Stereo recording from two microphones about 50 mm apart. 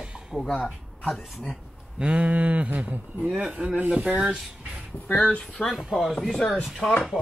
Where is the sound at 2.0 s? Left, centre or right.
Right.